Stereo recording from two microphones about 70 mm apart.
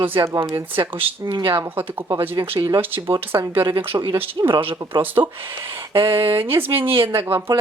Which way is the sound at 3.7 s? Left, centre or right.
Right.